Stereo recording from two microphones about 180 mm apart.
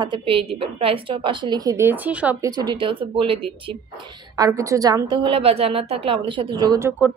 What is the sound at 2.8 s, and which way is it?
A woman's voice, 30° right (ahead or behind).